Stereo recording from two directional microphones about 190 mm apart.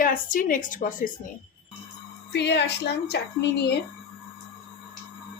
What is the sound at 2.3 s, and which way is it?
Speech, 60° left (ahead or behind).